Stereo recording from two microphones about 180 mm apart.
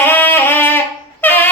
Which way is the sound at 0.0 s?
10° left (ahead or behind).